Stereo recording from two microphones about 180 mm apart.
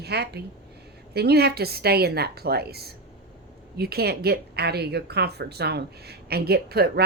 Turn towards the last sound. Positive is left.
turn(degrees=-60)  # may be behind; listen again after turning